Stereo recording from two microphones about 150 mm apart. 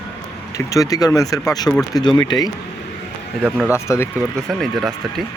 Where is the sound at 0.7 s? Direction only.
25° left (ahead or behind).